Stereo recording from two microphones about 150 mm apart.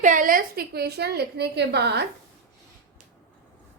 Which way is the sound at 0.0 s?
60° right (ahead or behind).